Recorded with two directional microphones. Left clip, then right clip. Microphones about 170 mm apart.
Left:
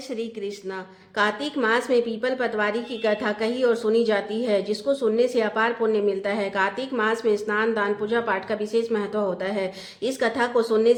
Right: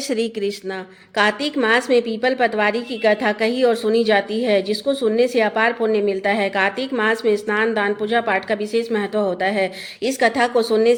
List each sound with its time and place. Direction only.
0.1 s speech: 35° right (ahead or behind)
1.1 s a woman's voice: 20° right (ahead or behind)